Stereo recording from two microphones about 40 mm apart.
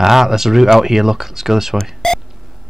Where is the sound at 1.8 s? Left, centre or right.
Centre.